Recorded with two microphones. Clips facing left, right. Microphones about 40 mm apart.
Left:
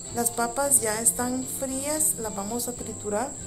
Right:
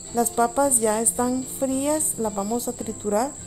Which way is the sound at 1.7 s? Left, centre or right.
Right.